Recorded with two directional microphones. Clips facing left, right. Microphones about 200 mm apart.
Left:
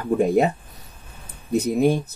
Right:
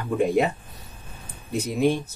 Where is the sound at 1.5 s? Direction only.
40° left (ahead or behind).